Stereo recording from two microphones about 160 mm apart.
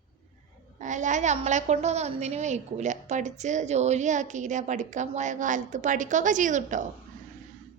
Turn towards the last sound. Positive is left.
turn(degrees=-50)  # may be behind; listen again after turning